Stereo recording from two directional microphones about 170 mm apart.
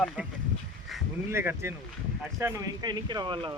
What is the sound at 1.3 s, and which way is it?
Speech, 15° right (ahead or behind).